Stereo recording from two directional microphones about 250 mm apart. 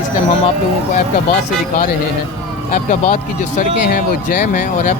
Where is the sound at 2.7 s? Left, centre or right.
Left.